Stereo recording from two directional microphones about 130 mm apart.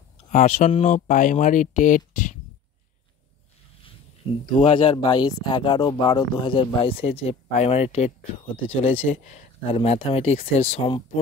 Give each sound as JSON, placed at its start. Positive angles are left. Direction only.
{"t": 0.3, "sound": "speech", "side_deg": 65}
{"t": 4.5, "sound": "speech", "side_deg": 40}
{"t": 9.1, "sound": "speech", "side_deg": 65}
{"t": 9.8, "sound": "speech", "side_deg": 45}